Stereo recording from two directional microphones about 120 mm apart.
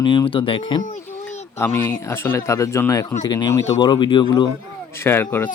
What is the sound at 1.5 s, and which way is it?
Speech, 20° left (ahead or behind).